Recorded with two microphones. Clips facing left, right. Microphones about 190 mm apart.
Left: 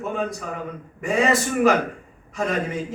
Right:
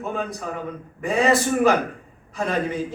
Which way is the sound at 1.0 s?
35° right (ahead or behind).